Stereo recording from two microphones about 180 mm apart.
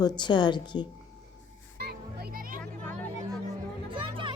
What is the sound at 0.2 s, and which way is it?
Speech, 25° left (ahead or behind).